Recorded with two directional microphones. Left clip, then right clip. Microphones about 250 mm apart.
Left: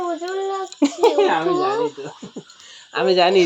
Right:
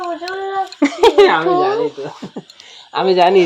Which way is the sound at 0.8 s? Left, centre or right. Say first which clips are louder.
Right 6 dB; centre.